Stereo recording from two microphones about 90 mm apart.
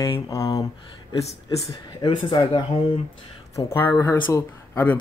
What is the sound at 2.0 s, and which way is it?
Speech, 60° left (ahead or behind).